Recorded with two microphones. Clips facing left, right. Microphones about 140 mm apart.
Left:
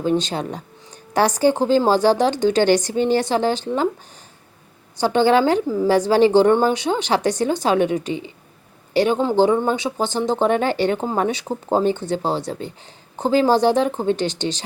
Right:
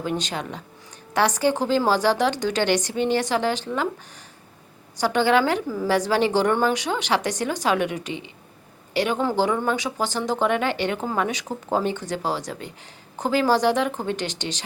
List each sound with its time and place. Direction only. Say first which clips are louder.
0.0 s a woman's voice: left 7 dB; 30° left (ahead or behind)
4.9 s a woman's voice: left 4 dB; 30° left (ahead or behind)